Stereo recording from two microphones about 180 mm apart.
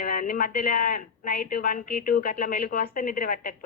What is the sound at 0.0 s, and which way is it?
Speech, 50° left (ahead or behind).